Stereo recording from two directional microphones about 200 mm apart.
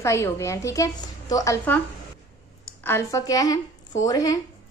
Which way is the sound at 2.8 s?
15° left (ahead or behind).